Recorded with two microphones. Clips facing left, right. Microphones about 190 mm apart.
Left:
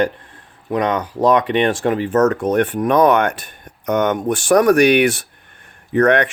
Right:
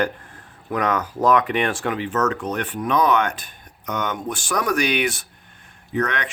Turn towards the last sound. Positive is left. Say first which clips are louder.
# left 10 dB
turn(degrees=55)  # may be behind; listen again after turning